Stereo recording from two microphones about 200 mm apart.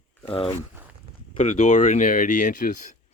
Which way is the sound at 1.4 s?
35° left (ahead or behind).